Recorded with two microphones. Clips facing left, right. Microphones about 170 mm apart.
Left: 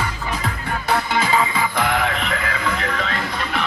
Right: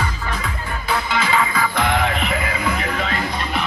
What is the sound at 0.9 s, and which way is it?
Music, 55° left (ahead or behind).